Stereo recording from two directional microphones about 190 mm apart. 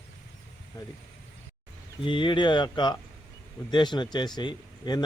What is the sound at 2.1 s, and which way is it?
Speech, 25° left (ahead or behind).